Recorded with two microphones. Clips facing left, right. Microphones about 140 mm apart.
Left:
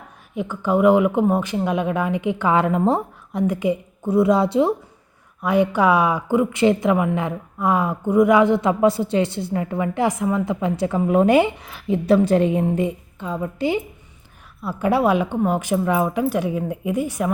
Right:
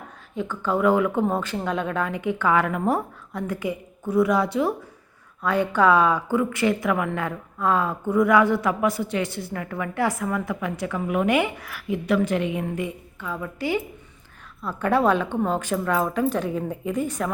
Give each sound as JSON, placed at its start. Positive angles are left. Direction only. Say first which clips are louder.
{"t": 0.3, "sound": "a woman's voice", "louder": "left 4 dB", "side_deg": 15}
{"t": 5.4, "sound": "a woman's voice", "louder": "left 3 dB", "side_deg": 15}
{"t": 14.6, "sound": "a woman's voice", "louder": "left 2 dB", "side_deg": 10}